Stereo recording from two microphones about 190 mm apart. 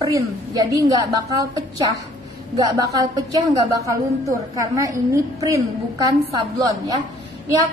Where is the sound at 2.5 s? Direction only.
20° right (ahead or behind).